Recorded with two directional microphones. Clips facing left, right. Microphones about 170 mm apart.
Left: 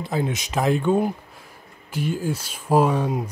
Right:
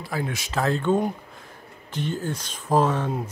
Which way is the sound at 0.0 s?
20° left (ahead or behind).